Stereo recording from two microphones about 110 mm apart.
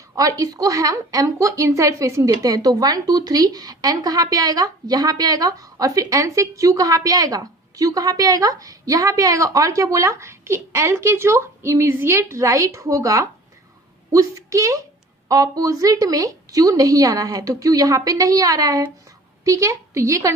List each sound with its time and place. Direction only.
0.2 s a woman's voice: 35° right (ahead or behind)